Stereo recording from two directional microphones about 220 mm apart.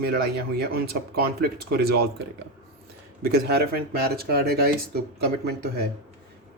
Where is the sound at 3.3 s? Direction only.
45° right (ahead or behind).